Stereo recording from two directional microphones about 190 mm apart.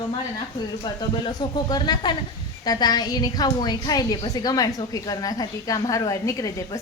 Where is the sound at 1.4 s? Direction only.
20° left (ahead or behind).